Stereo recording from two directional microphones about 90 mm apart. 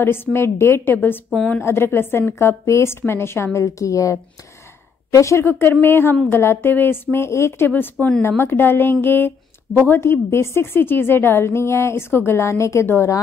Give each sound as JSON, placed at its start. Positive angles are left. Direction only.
{"t": 0.0, "sound": "a woman's voice", "side_deg": 25}
{"t": 1.3, "sound": "a woman's voice", "side_deg": 5}
{"t": 1.6, "sound": "a woman's voice", "side_deg": 25}